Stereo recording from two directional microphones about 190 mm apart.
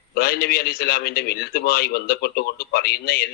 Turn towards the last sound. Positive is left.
turn(degrees=55)  # may be behind; listen again after turning